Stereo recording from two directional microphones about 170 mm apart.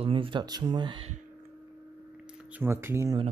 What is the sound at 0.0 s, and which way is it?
Speech, 30° right (ahead or behind).